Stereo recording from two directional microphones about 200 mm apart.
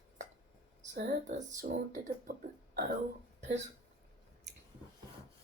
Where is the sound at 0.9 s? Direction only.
45° right (ahead or behind).